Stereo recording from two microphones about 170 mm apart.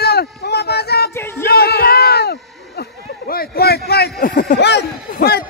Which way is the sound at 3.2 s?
65° left (ahead or behind).